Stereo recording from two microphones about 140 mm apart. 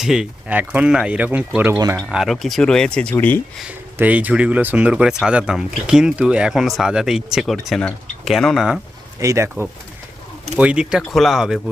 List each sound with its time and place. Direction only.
0.0 s speech: 5° right (ahead or behind)
2.0 s speech: centre (ahead or behind)
3.9 s speech: 10° right (ahead or behind)
9.2 s speech: 20° right (ahead or behind)
10.6 s speech: 5° right (ahead or behind)